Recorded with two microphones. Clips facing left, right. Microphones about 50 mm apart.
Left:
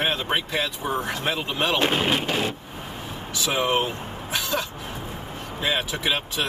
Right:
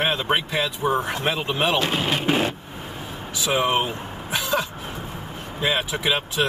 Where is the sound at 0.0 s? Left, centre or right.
Centre.